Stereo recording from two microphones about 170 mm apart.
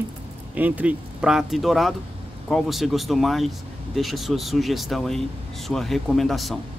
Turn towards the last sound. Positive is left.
turn(degrees=0)  # may be behind; listen again after turning